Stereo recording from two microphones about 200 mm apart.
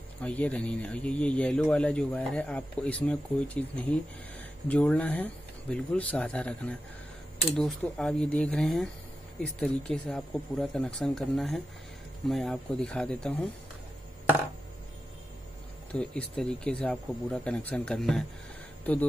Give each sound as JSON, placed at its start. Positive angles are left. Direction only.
{"t": 0.2, "sound": "speech", "side_deg": 5}
{"t": 15.9, "sound": "speech", "side_deg": 5}